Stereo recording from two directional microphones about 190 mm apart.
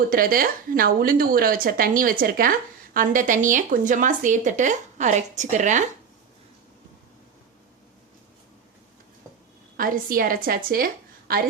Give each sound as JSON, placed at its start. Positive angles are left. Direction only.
{"t": 0.1, "sound": "a woman's voice", "side_deg": -50}
{"t": 9.7, "sound": "a woman's voice", "side_deg": -50}